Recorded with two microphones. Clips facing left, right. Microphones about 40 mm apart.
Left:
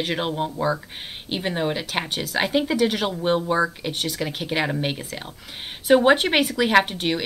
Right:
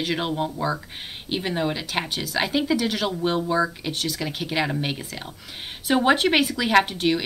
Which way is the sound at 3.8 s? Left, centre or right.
Centre.